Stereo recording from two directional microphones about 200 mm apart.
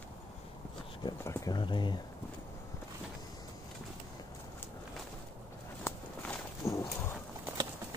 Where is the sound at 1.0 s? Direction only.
15° left (ahead or behind).